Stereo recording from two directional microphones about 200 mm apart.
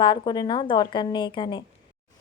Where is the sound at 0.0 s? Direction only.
20° left (ahead or behind).